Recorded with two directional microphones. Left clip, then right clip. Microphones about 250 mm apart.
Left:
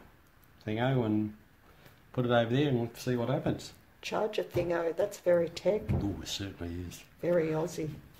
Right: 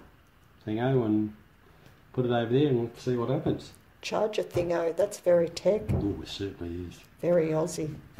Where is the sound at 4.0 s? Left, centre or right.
Centre.